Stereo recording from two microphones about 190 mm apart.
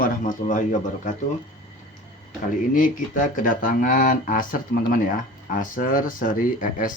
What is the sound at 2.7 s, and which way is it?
Speech, 45° left (ahead or behind).